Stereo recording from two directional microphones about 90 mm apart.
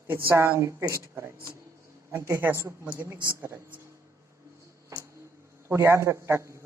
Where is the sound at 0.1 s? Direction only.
25° right (ahead or behind).